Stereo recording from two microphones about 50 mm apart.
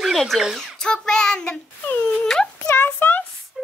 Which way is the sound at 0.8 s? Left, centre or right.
Centre.